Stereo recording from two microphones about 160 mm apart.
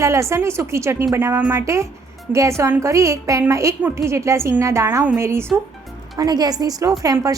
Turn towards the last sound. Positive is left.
turn(degrees=-20)  # may be behind; listen again after turning